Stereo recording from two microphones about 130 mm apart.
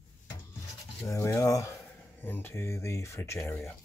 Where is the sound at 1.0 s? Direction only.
20° left (ahead or behind).